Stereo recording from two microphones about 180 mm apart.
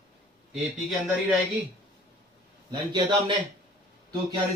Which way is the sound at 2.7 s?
25° right (ahead or behind).